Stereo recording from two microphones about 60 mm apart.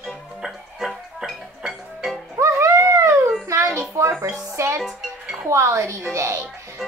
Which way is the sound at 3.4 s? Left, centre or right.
Right.